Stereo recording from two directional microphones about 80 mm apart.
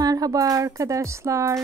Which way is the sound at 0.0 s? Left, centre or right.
Right.